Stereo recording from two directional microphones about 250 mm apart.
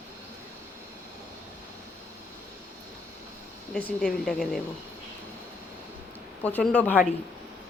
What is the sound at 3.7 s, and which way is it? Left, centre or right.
Speech, centre.